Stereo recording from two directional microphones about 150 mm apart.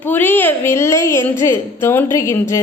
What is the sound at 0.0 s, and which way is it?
A woman's voice, 15° left (ahead or behind).